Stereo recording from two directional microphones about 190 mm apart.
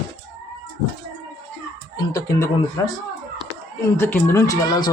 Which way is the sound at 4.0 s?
10° left (ahead or behind).